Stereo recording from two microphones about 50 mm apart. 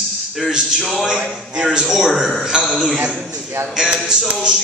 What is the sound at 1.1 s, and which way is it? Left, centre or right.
Speech, centre.